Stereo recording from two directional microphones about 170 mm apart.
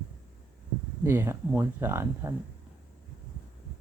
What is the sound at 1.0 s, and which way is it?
Speech, 15° right (ahead or behind).